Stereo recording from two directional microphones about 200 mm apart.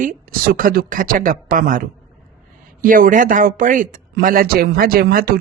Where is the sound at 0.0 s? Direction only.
45° right (ahead or behind).